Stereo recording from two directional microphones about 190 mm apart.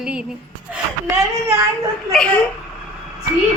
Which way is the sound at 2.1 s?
5° left (ahead or behind).